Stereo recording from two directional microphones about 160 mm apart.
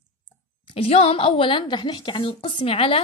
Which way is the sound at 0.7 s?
35° left (ahead or behind).